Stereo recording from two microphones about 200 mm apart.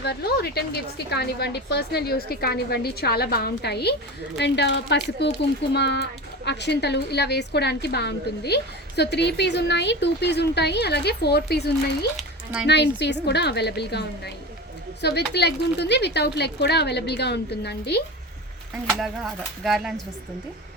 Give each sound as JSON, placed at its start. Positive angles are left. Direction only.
{"t": 0.0, "sound": "a woman's voice", "side_deg": 55}
{"t": 12.1, "sound": "a sound", "side_deg": -5}
{"t": 12.6, "sound": "a woman's voice", "side_deg": 60}
{"t": 15.0, "sound": "a woman's voice", "side_deg": 55}
{"t": 18.9, "sound": "speech", "side_deg": 0}